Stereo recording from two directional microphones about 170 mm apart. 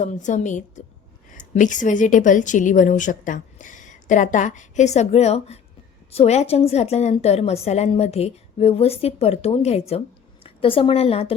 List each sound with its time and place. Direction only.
0.0 s a woman's voice: 45° left (ahead or behind)